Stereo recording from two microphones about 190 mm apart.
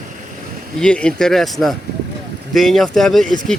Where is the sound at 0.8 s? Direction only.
5° left (ahead or behind).